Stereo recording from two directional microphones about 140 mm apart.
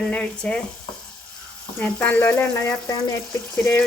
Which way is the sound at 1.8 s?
10° left (ahead or behind).